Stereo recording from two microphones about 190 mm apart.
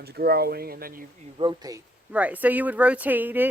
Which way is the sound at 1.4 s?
20° right (ahead or behind).